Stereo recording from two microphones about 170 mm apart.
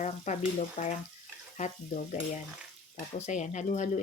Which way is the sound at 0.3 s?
45° left (ahead or behind).